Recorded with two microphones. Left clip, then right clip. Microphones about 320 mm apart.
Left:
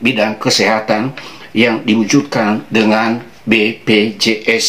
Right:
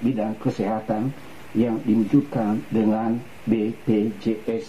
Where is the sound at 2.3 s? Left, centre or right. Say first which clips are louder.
Left 11 dB; centre.